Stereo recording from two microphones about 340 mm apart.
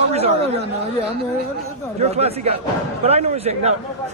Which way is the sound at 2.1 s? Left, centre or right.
Centre.